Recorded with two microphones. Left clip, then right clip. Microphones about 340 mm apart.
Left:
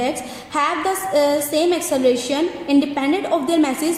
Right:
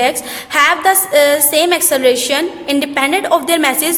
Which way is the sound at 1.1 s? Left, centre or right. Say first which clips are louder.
Right 4 dB; right.